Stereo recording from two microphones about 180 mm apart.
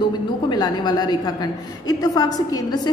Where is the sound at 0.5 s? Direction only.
25° left (ahead or behind).